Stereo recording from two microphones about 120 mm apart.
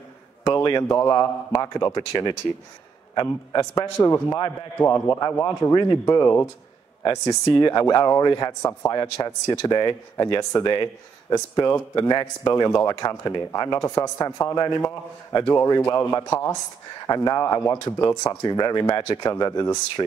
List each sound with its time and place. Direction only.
0.5 s a man's voice: 30° left (ahead or behind)
3.8 s speech: 20° left (ahead or behind)
5.2 s speech: 30° left (ahead or behind)
7.4 s speech: 35° left (ahead or behind)